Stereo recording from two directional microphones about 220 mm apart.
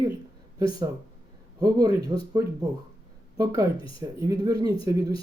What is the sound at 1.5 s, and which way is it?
Speech, 15° right (ahead or behind).